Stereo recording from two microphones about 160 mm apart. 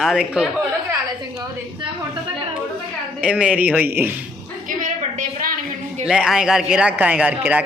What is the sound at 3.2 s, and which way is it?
Speech, 5° right (ahead or behind).